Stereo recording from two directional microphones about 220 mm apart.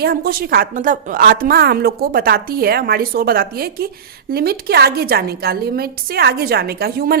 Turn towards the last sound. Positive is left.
turn(degrees=-45)  # may be behind; listen again after turning